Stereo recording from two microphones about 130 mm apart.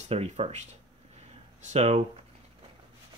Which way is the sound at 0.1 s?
55° right (ahead or behind).